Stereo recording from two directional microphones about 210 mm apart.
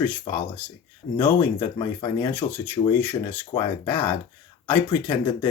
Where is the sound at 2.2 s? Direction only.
10° left (ahead or behind).